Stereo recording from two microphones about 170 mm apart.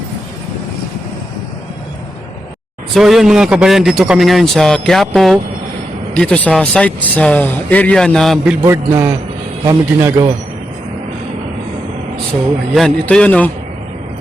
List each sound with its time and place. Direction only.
2.9 s a man's voice: centre (ahead or behind)
8.6 s a man's voice: 15° right (ahead or behind)
12.7 s a man's voice: 5° left (ahead or behind)